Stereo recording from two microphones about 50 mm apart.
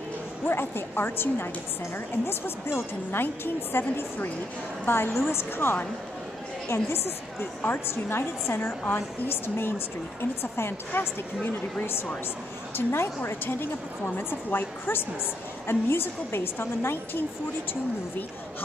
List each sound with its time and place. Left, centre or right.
0.5 s a woman's voice: left
7.9 s a woman's voice: left
10.9 s a woman's voice: left